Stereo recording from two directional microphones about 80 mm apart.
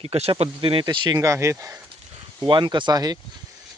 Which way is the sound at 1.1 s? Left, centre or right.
Right.